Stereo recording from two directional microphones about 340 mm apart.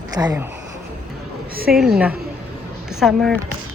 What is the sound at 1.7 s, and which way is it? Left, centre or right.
A woman's voice, centre.